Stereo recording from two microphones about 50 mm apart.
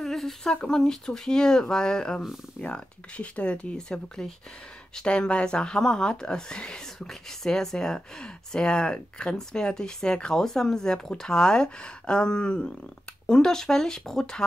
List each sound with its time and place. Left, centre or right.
0.0 s a sound: centre
0.7 s speech: centre
2.6 s speech: left